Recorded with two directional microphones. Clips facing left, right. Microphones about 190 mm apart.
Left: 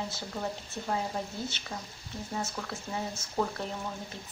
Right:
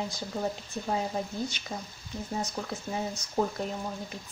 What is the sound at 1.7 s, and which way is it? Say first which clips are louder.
Speech: right 3 dB; 25° right (ahead or behind).